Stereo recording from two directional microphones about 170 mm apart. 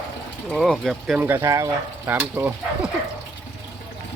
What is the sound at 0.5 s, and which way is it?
Speech, centre (ahead or behind).